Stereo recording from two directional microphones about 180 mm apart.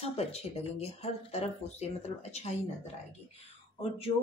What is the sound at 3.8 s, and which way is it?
Speech, 35° left (ahead or behind).